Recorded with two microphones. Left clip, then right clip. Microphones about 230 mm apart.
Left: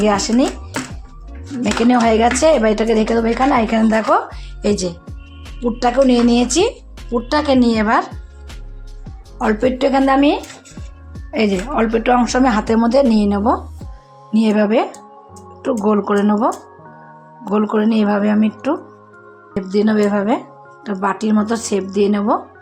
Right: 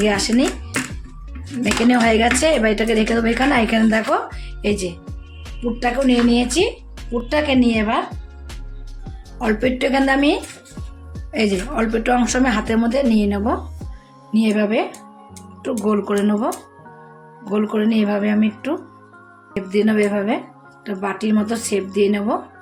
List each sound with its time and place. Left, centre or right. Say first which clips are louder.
0.0 s speech: left 2 dB; centre
1.6 s speech: left 2 dB; centre
9.0 s music: left 3 dB; centre
9.6 s music: left 3 dB; centre
11.3 s speech: left 3 dB; centre
17.5 s speech: left 3 dB; centre
20.0 s speech: left 3 dB; left